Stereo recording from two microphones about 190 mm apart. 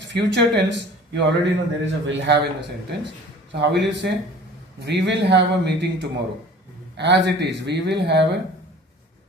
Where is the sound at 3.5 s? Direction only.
65° right (ahead or behind).